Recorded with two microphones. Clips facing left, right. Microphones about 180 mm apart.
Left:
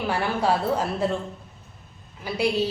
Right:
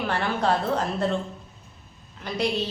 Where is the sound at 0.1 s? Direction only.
10° left (ahead or behind).